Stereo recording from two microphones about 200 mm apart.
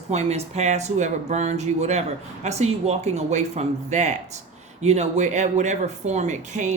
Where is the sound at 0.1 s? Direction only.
35° right (ahead or behind).